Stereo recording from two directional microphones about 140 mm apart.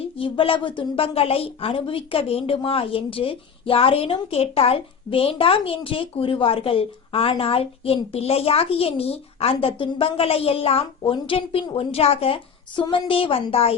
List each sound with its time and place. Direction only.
0.0 s a woman's voice: 40° left (ahead or behind)